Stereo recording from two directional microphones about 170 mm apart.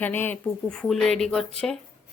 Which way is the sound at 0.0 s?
10° left (ahead or behind).